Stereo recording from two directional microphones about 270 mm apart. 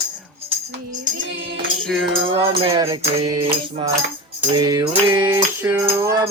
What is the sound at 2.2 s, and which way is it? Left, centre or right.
Music, centre.